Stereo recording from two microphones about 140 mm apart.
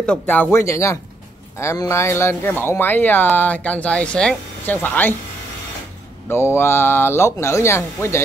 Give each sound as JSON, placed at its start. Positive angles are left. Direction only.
{"t": 0.0, "sound": "speech", "side_deg": 10}
{"t": 6.2, "sound": "speech", "side_deg": 15}